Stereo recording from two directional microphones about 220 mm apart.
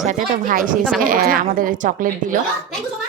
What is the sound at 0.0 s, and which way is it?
A woman's voice, 40° right (ahead or behind).